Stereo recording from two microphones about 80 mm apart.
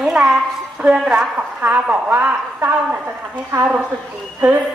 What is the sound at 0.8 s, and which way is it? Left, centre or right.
Speech, centre.